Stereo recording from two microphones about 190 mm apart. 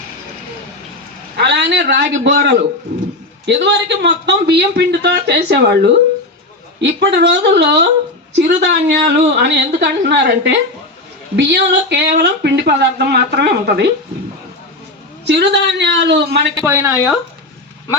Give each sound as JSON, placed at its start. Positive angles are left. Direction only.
{"t": 1.4, "sound": "speech", "side_deg": -65}
{"t": 15.2, "sound": "speech", "side_deg": -65}
{"t": 16.6, "sound": "speech", "side_deg": -15}